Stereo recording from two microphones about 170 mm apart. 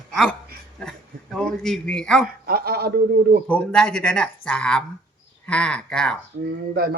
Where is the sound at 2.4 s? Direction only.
65° right (ahead or behind).